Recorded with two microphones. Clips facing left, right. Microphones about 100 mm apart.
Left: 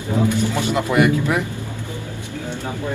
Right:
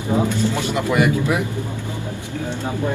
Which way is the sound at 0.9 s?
20° right (ahead or behind).